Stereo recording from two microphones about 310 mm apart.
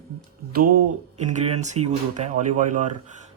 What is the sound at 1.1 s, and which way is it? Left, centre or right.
Speech, right.